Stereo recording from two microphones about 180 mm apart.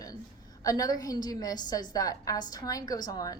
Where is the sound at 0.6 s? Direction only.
20° left (ahead or behind).